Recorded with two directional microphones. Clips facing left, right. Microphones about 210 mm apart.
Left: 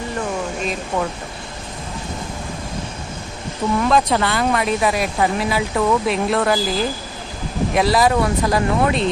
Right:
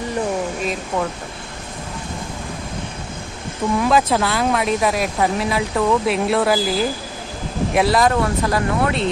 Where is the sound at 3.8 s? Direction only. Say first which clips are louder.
Even; 5° right (ahead or behind).